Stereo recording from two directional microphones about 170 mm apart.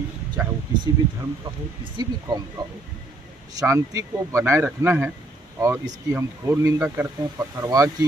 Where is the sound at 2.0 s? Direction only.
25° right (ahead or behind).